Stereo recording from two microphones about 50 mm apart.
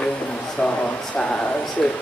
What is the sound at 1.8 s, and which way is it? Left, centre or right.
Speech, centre.